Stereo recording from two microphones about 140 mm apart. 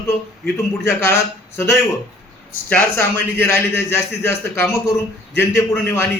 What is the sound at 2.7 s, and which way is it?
A man's voice, 15° left (ahead or behind).